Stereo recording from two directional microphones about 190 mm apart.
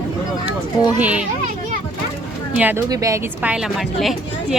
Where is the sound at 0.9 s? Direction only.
5° right (ahead or behind).